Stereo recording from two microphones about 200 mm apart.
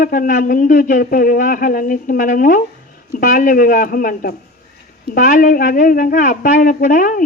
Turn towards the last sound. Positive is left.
turn(degrees=40)  # may be behind; listen again after turning